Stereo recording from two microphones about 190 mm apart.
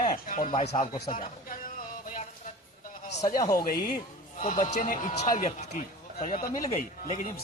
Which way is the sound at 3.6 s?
50° left (ahead or behind).